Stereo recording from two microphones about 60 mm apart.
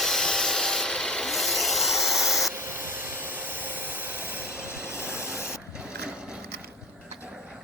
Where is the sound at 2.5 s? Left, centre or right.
Right.